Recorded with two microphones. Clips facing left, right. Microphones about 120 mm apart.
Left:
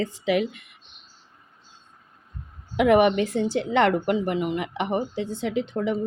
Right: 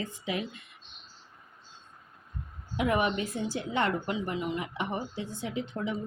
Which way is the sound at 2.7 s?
75° left (ahead or behind).